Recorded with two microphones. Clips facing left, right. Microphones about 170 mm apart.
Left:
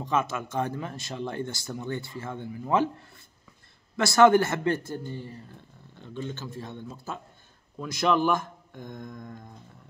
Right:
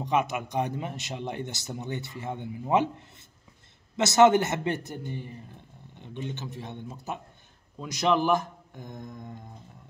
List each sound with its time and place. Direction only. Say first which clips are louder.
0.0 s speech: right 1 dB; 15° right (ahead or behind)
3.9 s speech: left 1 dB; 20° right (ahead or behind)